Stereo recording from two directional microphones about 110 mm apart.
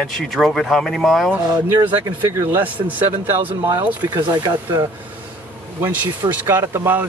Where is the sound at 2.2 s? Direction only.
25° right (ahead or behind).